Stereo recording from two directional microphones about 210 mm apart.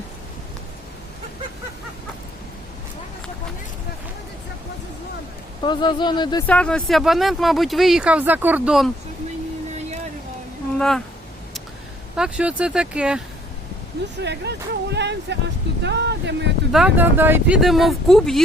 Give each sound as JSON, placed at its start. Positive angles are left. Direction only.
{"t": 5.6, "sound": "speech", "side_deg": 20}
{"t": 6.5, "sound": "speech", "side_deg": 5}
{"t": 10.8, "sound": "speech", "side_deg": 0}
{"t": 12.1, "sound": "speech", "side_deg": -5}
{"t": 14.2, "sound": "speech", "side_deg": -55}
{"t": 16.7, "sound": "speech", "side_deg": -5}